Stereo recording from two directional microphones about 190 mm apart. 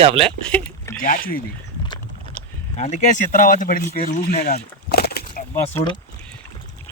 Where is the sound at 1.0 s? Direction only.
50° left (ahead or behind).